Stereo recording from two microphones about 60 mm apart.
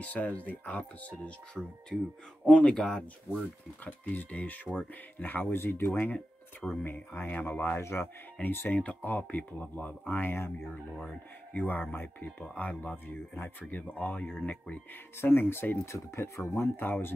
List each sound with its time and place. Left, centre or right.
0.0 s speech: left
3.3 s speech: left
6.1 s speech: centre
7.2 s speech: left
8.4 s speech: left
10.7 s speech: left
15.1 s speech: left
15.9 s speech: left